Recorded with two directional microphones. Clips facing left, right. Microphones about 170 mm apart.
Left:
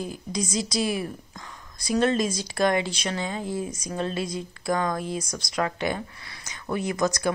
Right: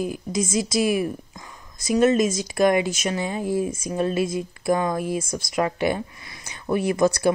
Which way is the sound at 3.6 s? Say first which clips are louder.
Right 5 dB; 25° right (ahead or behind).